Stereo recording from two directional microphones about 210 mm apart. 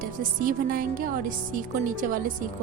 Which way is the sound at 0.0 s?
40° right (ahead or behind).